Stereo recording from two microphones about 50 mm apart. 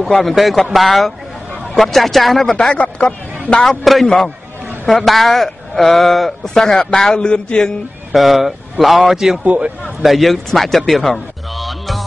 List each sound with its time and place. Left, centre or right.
0.0 s speech: centre
2.5 s a man's voice: left
3.8 s a man's voice: centre
8.1 s a man's voice: centre
9.4 s a man's voice: right
10.0 s speech: centre